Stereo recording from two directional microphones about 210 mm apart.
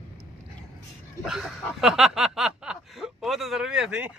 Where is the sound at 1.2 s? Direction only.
Centre (ahead or behind).